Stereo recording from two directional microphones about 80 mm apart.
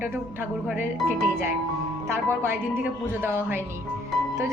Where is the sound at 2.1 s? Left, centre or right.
Right.